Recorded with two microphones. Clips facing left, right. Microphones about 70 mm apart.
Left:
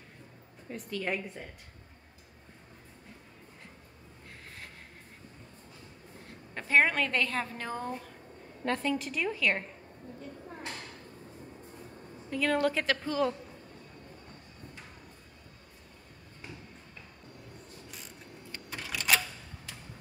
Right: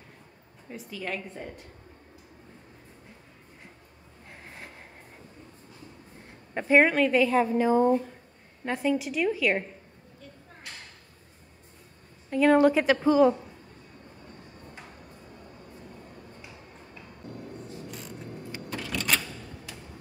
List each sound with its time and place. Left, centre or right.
0.7 s a woman's voice: centre
1.0 s a woman's voice: centre
6.5 s speech: centre
12.3 s speech: right
18.7 s typewriter: centre